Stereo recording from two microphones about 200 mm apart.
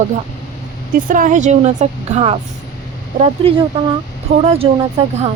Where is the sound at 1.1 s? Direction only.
40° right (ahead or behind).